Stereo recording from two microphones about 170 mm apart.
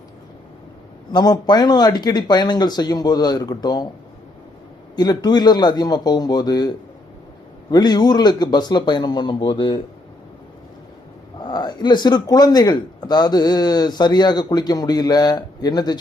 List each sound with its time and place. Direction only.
1.1 s speech: 25° left (ahead or behind)
4.9 s speech: 25° left (ahead or behind)
7.7 s speech: 25° left (ahead or behind)
11.4 s speech: 25° left (ahead or behind)